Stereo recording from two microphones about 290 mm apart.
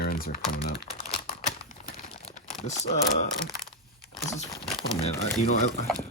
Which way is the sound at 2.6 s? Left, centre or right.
Left.